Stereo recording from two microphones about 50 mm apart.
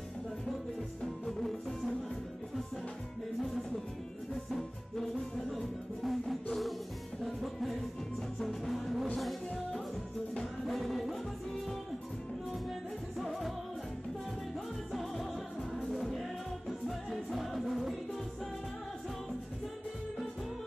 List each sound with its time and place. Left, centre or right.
1.0 s music: centre
3.3 s music: centre
13.2 s music: centre
14.9 s music: centre